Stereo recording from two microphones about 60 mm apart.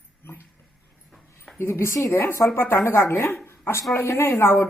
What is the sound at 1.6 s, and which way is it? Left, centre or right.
Speech, left.